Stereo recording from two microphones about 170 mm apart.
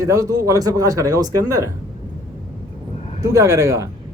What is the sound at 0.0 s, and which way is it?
Speech, 20° right (ahead or behind).